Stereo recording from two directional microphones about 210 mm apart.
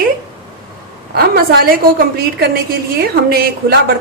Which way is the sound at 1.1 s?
45° right (ahead or behind).